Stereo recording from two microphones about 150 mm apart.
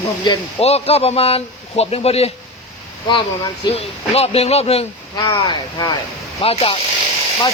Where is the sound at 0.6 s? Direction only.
40° left (ahead or behind).